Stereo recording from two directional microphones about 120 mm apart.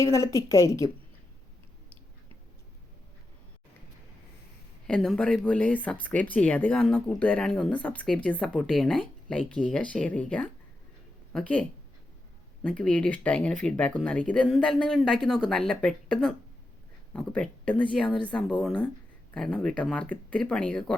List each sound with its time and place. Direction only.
0.0 s a woman's voice: 25° left (ahead or behind)
4.9 s speech: 5° left (ahead or behind)
12.6 s speech: 10° left (ahead or behind)